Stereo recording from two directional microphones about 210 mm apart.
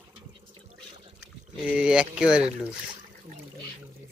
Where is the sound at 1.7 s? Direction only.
5° right (ahead or behind).